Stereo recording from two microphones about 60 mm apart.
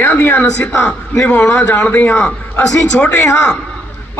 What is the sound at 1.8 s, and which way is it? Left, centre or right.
Speech, left.